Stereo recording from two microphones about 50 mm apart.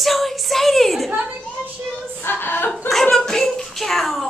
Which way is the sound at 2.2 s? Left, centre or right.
Left.